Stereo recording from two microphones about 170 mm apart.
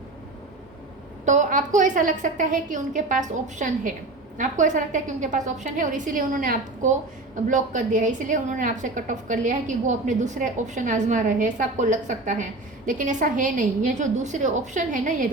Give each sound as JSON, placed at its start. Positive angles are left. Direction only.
{"t": 1.2, "sound": "a woman's voice", "side_deg": -45}